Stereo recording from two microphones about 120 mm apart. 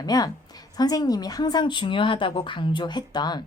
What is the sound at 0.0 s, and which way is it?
A woman's voice, 30° left (ahead or behind).